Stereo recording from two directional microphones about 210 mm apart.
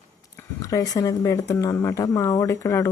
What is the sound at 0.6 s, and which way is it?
Speech, 15° left (ahead or behind).